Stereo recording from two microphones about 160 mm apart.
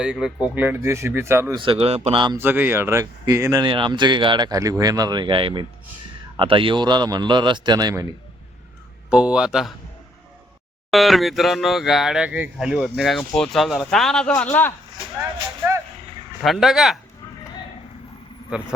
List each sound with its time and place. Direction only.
0.0 s speech: 5° right (ahead or behind)
1.5 s speech: 35° right (ahead or behind)
2.4 s speech: 15° right (ahead or behind)
9.0 s speech: 10° right (ahead or behind)
10.9 s speech: centre (ahead or behind)
16.4 s speech: centre (ahead or behind)